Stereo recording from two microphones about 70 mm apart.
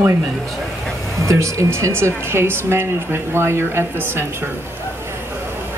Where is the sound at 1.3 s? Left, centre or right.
Right.